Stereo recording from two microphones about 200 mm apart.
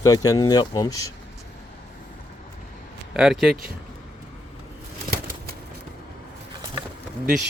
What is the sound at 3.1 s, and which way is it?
Speech, 5° right (ahead or behind).